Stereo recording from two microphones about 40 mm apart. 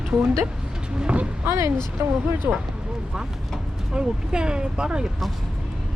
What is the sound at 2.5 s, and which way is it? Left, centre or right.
Speech, right.